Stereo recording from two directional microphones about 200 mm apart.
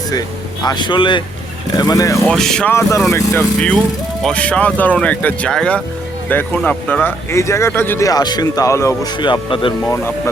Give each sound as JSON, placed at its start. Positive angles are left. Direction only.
{"t": 0.1, "sound": "speech", "side_deg": 20}
{"t": 2.2, "sound": "speech", "side_deg": 0}
{"t": 9.8, "sound": "speech", "side_deg": 15}